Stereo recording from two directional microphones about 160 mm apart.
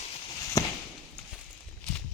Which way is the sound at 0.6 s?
20° left (ahead or behind).